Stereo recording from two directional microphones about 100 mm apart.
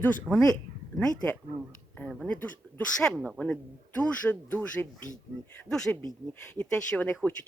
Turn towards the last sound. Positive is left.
turn(degrees=15)  # may be behind; listen again after turning